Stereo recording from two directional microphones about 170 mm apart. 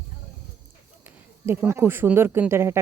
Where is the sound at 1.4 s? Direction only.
10° right (ahead or behind).